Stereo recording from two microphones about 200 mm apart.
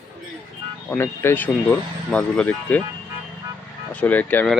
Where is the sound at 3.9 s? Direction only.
5° left (ahead or behind).